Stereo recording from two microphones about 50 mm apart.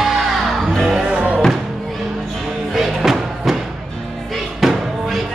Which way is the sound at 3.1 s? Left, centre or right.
Centre.